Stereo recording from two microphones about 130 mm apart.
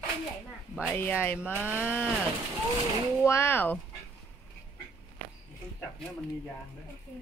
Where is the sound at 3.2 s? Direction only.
20° left (ahead or behind).